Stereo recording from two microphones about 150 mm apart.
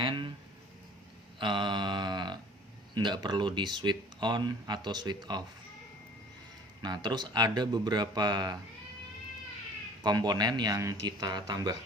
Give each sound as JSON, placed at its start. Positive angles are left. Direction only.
{"t": 0.0, "sound": "a sound", "side_deg": -35}
{"t": 1.4, "sound": "mantra", "side_deg": -30}
{"t": 2.9, "sound": "speech", "side_deg": -30}
{"t": 6.8, "sound": "speech", "side_deg": -30}
{"t": 10.0, "sound": "speech", "side_deg": -30}